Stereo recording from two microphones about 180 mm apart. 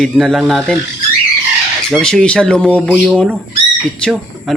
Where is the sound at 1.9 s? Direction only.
5° left (ahead or behind).